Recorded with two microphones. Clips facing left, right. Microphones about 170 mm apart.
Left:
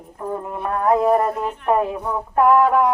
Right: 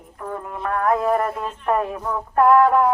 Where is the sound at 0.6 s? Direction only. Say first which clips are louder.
Left 3 dB; 20° left (ahead or behind).